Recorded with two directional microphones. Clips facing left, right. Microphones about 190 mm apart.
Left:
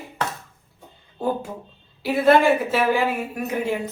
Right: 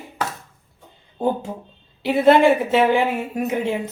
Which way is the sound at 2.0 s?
25° right (ahead or behind).